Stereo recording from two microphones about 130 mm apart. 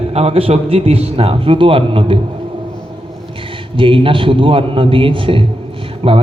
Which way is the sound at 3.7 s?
40° right (ahead or behind).